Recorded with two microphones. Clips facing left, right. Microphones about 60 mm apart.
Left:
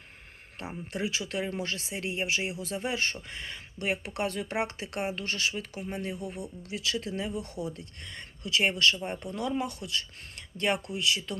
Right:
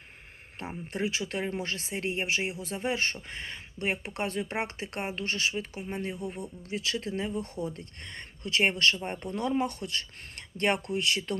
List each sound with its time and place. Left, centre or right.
0.6 s speech: right